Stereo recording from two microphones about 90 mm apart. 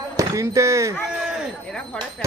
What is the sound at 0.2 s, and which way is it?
Speech, 35° right (ahead or behind).